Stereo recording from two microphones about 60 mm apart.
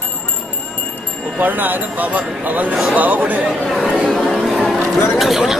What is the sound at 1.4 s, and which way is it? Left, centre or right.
Speech, right.